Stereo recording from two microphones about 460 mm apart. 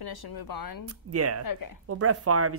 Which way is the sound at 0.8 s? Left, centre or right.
Right.